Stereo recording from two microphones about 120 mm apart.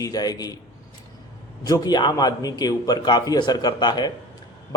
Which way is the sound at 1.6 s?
30° left (ahead or behind).